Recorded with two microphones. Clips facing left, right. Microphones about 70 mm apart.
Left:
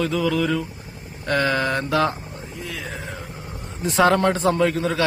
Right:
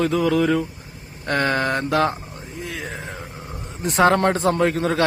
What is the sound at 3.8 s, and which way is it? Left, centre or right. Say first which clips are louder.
Speech: right 1 dB; right.